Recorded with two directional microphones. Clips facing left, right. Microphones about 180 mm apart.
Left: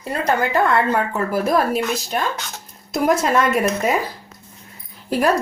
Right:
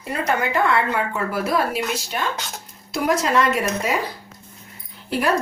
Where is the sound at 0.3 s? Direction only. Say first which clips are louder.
Left 3 dB; 40° left (ahead or behind).